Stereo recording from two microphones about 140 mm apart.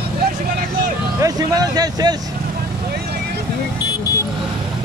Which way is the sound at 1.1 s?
25° right (ahead or behind).